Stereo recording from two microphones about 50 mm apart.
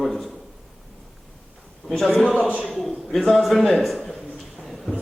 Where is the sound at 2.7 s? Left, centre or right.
Centre.